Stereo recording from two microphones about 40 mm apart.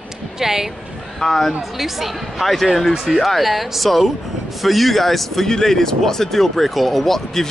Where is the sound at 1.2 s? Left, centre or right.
Centre.